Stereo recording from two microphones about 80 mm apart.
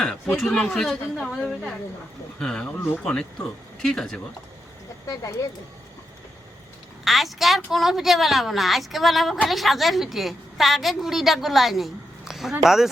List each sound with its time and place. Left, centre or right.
0.0 s a woman's voice: centre
5.0 s speech: left
7.0 s a woman's voice: centre